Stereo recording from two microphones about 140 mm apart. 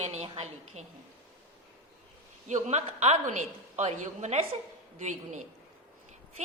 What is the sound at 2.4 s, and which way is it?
A woman's voice, 55° right (ahead or behind).